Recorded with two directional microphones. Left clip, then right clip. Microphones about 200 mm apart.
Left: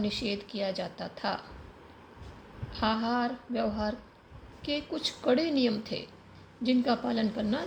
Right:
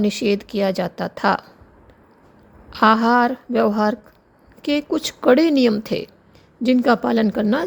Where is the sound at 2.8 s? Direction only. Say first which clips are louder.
Right 15 dB; 65° right (ahead or behind).